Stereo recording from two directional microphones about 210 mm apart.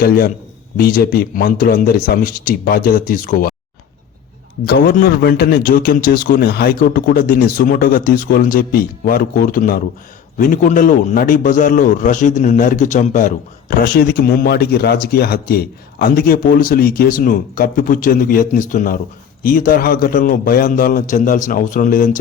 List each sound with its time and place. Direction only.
0.0 s a man's voice: 45° left (ahead or behind)
4.6 s a man's voice: 45° left (ahead or behind)